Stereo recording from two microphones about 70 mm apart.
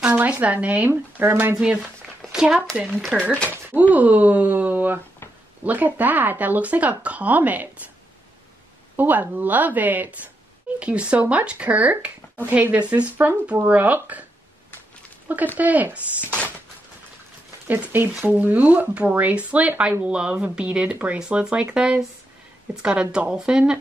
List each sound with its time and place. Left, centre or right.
0.0 s speech: centre
2.3 s speech: centre
3.9 s speech: right
8.9 s speech: right
15.2 s speech: right
17.6 s speech: right